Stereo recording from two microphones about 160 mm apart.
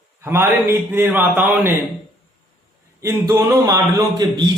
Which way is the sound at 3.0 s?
15° right (ahead or behind).